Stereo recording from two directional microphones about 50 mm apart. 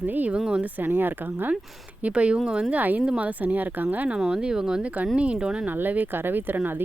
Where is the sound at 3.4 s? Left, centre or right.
Right.